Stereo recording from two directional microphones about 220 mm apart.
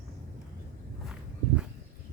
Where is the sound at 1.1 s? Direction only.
5° right (ahead or behind).